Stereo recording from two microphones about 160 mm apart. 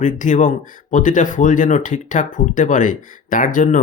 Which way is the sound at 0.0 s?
55° left (ahead or behind).